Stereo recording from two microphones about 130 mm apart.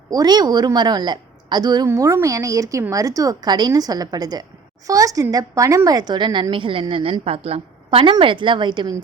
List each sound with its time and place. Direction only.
0.1 s a woman's voice: 30° right (ahead or behind)
1.9 s a woman's voice: 20° right (ahead or behind); by 9.0 s 35° right (ahead or behind)